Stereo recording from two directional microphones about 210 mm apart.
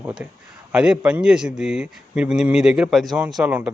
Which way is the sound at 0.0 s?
5° right (ahead or behind).